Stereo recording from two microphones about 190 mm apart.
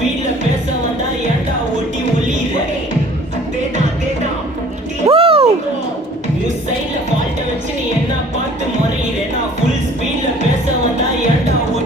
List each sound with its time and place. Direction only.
5.0 s music: 30° right (ahead or behind)